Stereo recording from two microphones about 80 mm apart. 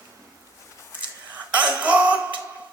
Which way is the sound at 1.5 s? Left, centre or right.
Centre.